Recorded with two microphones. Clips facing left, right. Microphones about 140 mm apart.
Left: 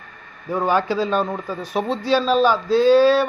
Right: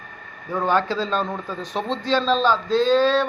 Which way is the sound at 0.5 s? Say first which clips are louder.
Left 2 dB; 10° left (ahead or behind).